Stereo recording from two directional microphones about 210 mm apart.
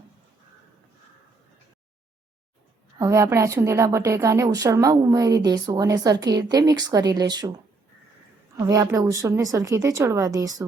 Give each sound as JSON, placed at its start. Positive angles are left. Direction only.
{"t": 3.0, "sound": "a woman's voice", "side_deg": -15}
{"t": 8.5, "sound": "a woman's voice", "side_deg": -15}